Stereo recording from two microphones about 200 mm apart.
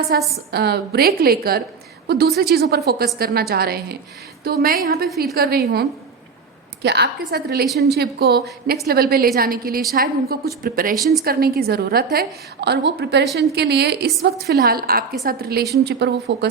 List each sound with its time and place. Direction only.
0.1 s a woman's voice: 50° right (ahead or behind)
6.8 s a woman's voice: 55° right (ahead or behind)